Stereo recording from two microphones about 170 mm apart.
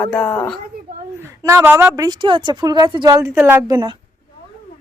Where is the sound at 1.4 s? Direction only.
15° right (ahead or behind).